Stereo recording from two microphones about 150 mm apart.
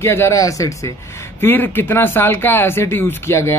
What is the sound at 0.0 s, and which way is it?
Speech, 15° left (ahead or behind).